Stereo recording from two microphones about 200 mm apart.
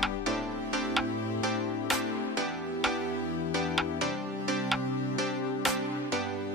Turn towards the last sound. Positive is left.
turn(degrees=0)  # may be behind; listen again after turning